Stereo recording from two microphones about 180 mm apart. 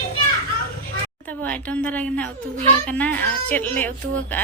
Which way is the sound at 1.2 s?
10° left (ahead or behind).